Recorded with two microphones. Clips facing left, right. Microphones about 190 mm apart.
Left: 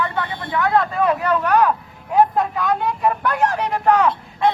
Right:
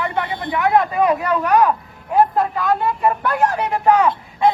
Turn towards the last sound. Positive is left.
turn(degrees=-10)  # may be behind; listen again after turning